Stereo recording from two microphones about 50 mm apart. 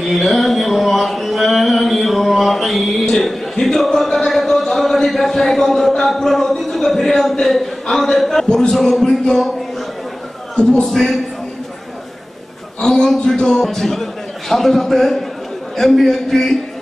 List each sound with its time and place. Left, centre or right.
0.0 s music: centre
7.8 s speech: centre
10.5 s a man's voice: centre
10.9 s a man's voice: centre
12.8 s a man's voice: centre